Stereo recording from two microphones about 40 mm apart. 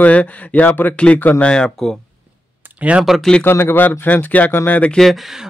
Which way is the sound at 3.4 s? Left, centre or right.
Left.